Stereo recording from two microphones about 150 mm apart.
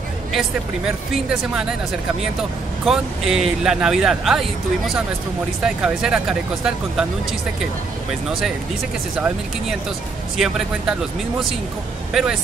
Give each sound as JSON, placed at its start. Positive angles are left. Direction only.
{"t": 0.3, "sound": "speech", "side_deg": 0}
{"t": 2.8, "sound": "speech", "side_deg": 0}
{"t": 10.3, "sound": "speech", "side_deg": -5}
{"t": 12.1, "sound": "speech", "side_deg": -5}